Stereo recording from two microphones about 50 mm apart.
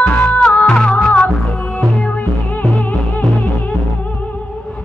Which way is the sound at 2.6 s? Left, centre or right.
Left.